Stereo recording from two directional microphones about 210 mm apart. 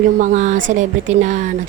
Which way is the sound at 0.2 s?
35° right (ahead or behind).